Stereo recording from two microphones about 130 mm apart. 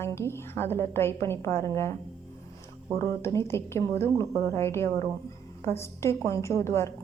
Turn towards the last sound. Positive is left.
turn(degrees=20)  # may be behind; listen again after turning